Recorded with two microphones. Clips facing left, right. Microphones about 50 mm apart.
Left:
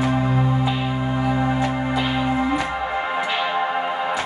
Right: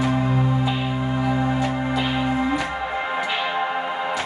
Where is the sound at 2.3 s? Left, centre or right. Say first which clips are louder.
Left 1 dB; centre.